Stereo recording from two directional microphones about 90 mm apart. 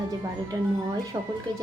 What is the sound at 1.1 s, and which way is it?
Speech, 45° right (ahead or behind).